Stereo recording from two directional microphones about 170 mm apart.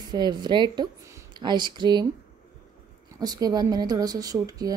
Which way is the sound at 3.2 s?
25° right (ahead or behind).